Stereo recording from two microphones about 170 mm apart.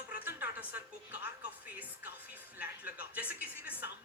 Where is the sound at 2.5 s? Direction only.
10° right (ahead or behind).